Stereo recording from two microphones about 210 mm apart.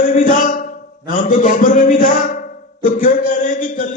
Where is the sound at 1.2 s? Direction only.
40° left (ahead or behind).